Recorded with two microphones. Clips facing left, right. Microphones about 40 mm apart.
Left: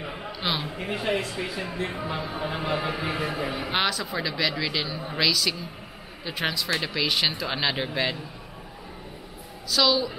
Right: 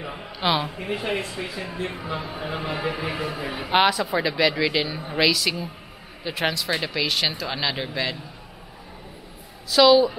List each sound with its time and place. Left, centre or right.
0.0 s a sound: centre
0.4 s speech: centre
0.9 s speech: right
1.3 s a man's voice: centre
3.7 s a man's voice: centre
9.7 s speech: centre